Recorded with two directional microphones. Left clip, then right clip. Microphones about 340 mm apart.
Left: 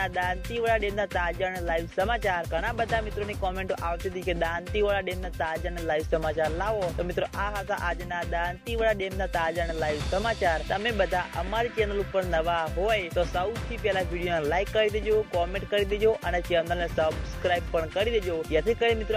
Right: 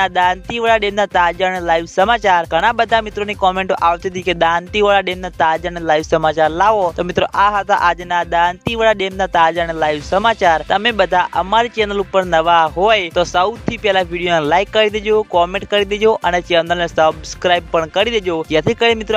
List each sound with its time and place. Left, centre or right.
0.0 s music: right